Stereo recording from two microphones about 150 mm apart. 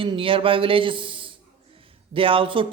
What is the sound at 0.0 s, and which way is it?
A man's voice, 35° right (ahead or behind).